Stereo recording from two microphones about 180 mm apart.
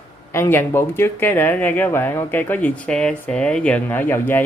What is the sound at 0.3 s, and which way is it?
Speech, 15° left (ahead or behind).